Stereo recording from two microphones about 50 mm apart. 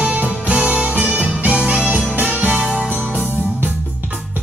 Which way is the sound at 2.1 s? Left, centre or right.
Right.